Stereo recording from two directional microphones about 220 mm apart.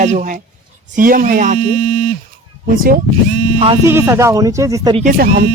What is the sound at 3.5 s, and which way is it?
Speech, 25° right (ahead or behind).